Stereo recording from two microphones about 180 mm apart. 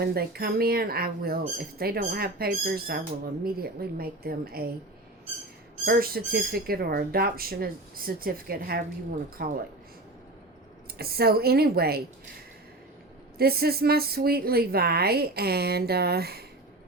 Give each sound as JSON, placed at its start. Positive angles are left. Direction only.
{"t": 0.0, "sound": "a woman's voice", "side_deg": -60}
{"t": 5.8, "sound": "a woman's voice", "side_deg": -60}
{"t": 10.9, "sound": "a woman's voice", "side_deg": -60}
{"t": 13.4, "sound": "a woman's voice", "side_deg": -60}